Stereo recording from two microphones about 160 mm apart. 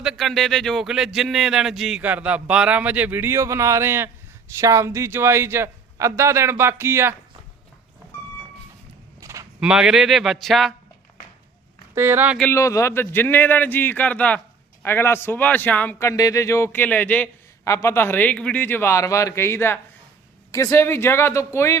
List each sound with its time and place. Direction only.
0.0 s a man's voice: centre (ahead or behind)
9.2 s a sound: 20° right (ahead or behind)
9.6 s speech: 5° right (ahead or behind)
11.9 s a man's voice: 15° right (ahead or behind)
12.4 s a man's voice: 15° left (ahead or behind)